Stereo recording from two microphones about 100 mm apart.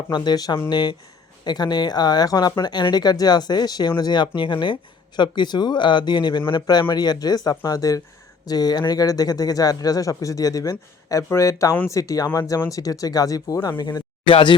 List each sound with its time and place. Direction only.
0.1 s speech: 45° left (ahead or behind)